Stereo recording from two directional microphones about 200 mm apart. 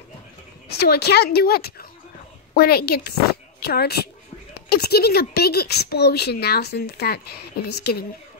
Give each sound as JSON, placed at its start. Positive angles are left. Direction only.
{"t": 0.7, "sound": "a woman's voice", "side_deg": 55}